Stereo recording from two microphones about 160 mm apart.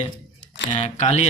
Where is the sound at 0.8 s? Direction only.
45° left (ahead or behind).